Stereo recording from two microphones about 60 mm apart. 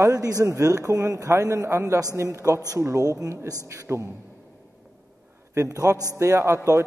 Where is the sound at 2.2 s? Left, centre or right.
Right.